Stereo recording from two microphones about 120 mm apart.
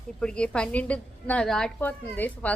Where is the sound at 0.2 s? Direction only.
10° left (ahead or behind).